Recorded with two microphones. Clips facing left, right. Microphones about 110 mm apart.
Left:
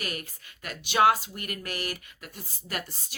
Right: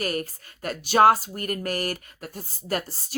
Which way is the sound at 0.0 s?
40° right (ahead or behind).